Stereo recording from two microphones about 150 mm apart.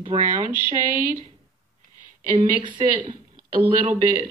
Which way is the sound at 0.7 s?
65° right (ahead or behind).